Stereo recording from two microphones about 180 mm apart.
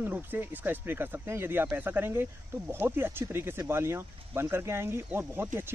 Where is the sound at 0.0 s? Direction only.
10° right (ahead or behind).